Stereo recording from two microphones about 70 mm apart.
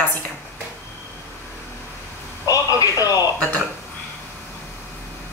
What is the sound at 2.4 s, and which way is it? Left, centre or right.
Speech, left.